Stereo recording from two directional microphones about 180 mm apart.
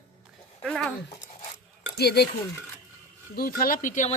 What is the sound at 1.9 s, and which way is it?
Speech, 65° left (ahead or behind).